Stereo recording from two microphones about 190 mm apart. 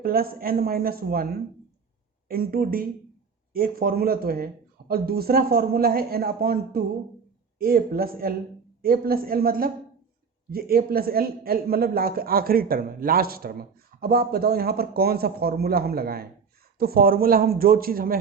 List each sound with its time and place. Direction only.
0.0 s a man's voice: 50° right (ahead or behind)